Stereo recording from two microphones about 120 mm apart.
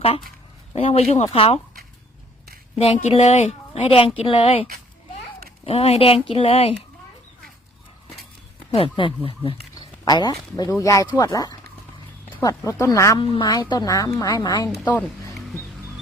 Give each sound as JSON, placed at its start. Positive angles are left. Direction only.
{"t": 0.7, "sound": "speech", "side_deg": 55}
{"t": 2.7, "sound": "speech", "side_deg": 60}
{"t": 3.8, "sound": "speech", "side_deg": 50}
{"t": 5.6, "sound": "speech", "side_deg": 55}
{"t": 8.7, "sound": "speech", "side_deg": 50}
{"t": 10.1, "sound": "a woman's voice", "side_deg": 35}
{"t": 13.1, "sound": "a woman's voice", "side_deg": 40}